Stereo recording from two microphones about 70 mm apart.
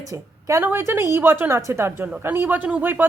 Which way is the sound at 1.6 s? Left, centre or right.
Right.